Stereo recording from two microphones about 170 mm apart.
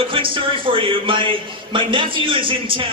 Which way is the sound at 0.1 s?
30° right (ahead or behind).